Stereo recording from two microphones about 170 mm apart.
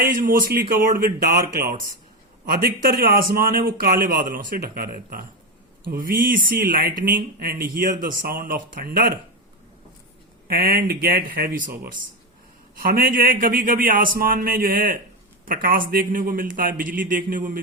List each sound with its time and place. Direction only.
0.0 s a man's voice: 55° right (ahead or behind)
10.5 s a man's voice: 60° right (ahead or behind)